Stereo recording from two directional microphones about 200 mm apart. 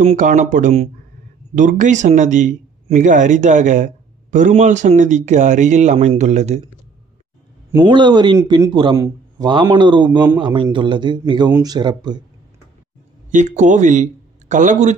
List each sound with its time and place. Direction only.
0.0 s a man's voice: 40° right (ahead or behind)
7.8 s speech: 25° right (ahead or behind)
13.3 s speech: 40° right (ahead or behind)